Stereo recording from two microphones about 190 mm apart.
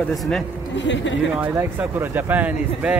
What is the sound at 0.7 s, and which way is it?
Speech, 75° left (ahead or behind).